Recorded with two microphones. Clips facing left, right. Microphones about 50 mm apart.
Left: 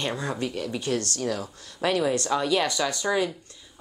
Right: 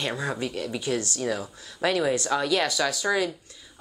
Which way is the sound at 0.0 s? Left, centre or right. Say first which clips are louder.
Even; centre.